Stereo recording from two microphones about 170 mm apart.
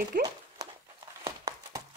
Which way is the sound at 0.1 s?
60° right (ahead or behind).